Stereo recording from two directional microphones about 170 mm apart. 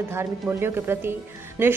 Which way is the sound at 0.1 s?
15° right (ahead or behind).